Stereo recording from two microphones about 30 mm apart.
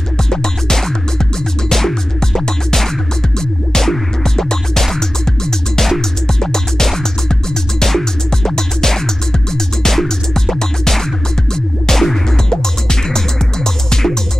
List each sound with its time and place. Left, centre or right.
0.2 s music: centre